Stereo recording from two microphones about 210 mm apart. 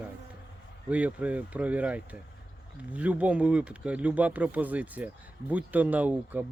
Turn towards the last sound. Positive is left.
turn(degrees=-5)  # may be behind; listen again after turning